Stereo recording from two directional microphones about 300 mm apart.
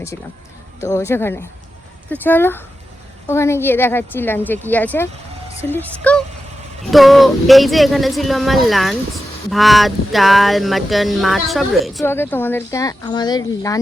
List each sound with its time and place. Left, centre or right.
0.8 s a woman's voice: centre